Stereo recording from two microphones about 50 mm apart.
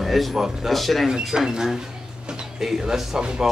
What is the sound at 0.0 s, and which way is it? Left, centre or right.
A man's voice, centre.